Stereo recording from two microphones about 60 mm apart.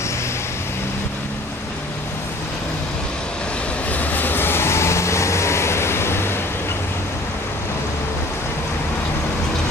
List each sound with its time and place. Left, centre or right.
4.0 s vehicle: left